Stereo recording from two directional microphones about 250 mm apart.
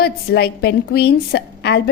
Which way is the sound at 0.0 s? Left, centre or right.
Left.